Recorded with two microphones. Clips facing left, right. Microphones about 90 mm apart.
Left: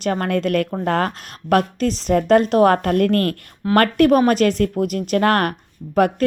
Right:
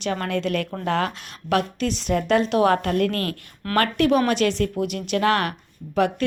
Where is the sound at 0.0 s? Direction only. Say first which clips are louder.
Left 5 dB; 45° left (ahead or behind).